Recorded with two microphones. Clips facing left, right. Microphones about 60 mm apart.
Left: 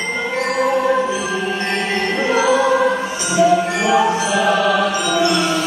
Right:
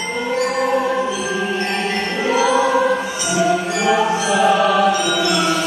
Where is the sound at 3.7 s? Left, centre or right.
Left.